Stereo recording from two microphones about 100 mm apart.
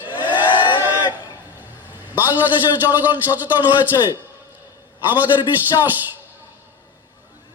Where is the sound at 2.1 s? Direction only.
20° right (ahead or behind).